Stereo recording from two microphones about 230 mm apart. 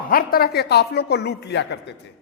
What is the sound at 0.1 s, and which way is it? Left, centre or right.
A man's voice, left.